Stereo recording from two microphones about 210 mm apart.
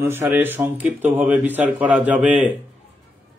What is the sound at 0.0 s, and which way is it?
A man's voice, 10° right (ahead or behind).